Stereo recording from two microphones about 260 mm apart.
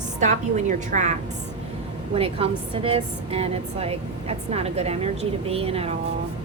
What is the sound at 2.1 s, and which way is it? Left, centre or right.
A woman's voice, right.